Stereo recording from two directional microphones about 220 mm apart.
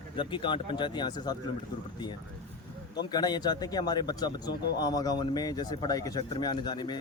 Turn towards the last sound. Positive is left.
turn(degrees=20)  # may be behind; listen again after turning